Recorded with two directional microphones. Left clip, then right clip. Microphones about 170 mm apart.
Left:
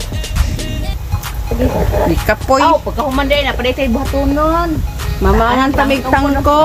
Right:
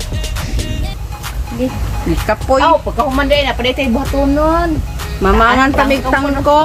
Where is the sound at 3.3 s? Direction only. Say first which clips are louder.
Right 1 dB; 5° left (ahead or behind).